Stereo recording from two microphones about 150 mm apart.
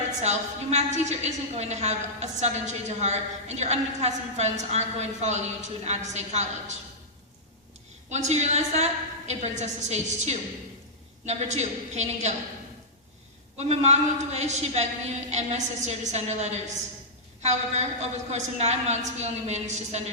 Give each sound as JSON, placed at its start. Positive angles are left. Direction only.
{"t": 0.2, "sound": "a woman's voice", "side_deg": -45}
{"t": 8.1, "sound": "a woman's voice", "side_deg": -50}
{"t": 13.6, "sound": "a woman's voice", "side_deg": -45}